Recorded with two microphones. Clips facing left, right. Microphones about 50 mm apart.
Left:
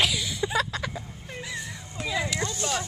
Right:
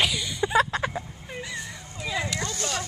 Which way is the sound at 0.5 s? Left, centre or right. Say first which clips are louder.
Right 8 dB; right.